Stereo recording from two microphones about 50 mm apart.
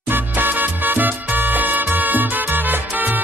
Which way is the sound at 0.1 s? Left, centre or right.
Right.